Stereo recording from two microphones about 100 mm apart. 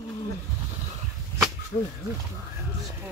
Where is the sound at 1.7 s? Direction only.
70° left (ahead or behind).